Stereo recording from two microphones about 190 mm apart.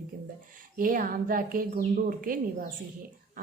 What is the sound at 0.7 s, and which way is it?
A woman's voice, 45° right (ahead or behind).